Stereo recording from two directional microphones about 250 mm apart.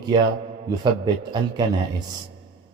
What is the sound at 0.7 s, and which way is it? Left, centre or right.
Speech, centre.